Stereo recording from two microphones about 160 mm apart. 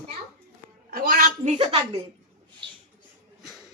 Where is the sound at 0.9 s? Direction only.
65° right (ahead or behind); by 1.7 s 50° right (ahead or behind).